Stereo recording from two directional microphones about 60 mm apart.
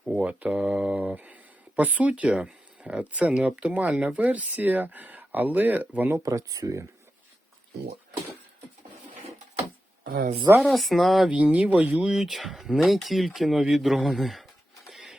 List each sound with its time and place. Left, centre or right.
0.0 s mantra: centre
0.3 s speech: centre
6.2 s speech: right
10.6 s speech: centre
11.3 s speech: centre
12.0 s speech: centre
14.8 s printer: centre